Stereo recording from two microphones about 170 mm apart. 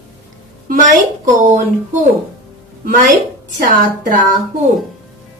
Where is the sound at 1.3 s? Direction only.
50° right (ahead or behind).